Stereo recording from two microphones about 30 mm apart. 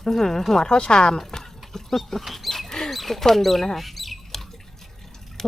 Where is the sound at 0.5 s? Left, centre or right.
Left.